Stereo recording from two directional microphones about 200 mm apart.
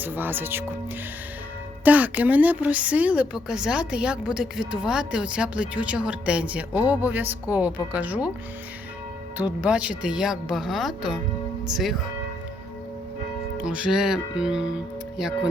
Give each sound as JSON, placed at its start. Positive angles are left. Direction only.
{"t": 0.0, "sound": "a woman's voice", "side_deg": -10}
{"t": 1.8, "sound": "a woman's voice", "side_deg": -10}
{"t": 9.4, "sound": "speech", "side_deg": -5}
{"t": 13.6, "sound": "speech", "side_deg": -5}